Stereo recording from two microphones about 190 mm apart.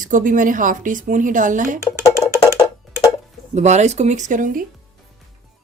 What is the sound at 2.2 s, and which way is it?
Music, 15° left (ahead or behind).